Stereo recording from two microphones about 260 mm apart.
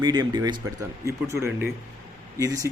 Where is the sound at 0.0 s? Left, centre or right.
Centre.